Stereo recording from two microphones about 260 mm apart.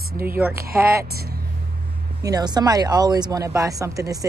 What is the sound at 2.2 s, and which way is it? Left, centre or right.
Speech, centre.